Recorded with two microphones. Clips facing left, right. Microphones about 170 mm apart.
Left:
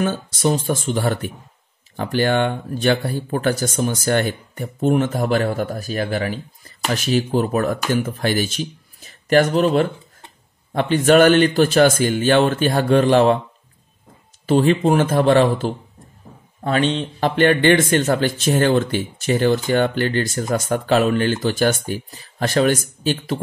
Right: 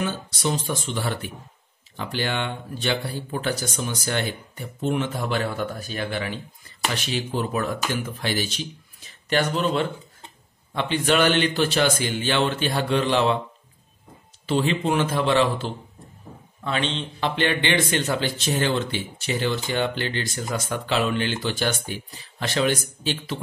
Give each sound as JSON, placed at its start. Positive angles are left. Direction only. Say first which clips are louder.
{"t": 0.0, "sound": "speech", "louder": "left 6 dB", "side_deg": 45}
{"t": 14.4, "sound": "speech", "louder": "left 7 dB", "side_deg": 45}